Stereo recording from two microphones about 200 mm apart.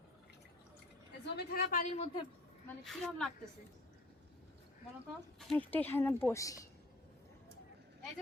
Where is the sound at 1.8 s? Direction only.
30° left (ahead or behind).